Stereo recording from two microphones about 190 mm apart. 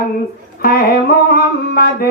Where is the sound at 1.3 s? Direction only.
55° left (ahead or behind).